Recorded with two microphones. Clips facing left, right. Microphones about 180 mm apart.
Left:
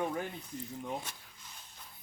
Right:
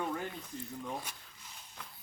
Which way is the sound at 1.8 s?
90° right.